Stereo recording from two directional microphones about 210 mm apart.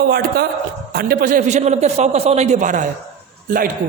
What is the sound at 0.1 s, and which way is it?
A man's voice, 45° right (ahead or behind).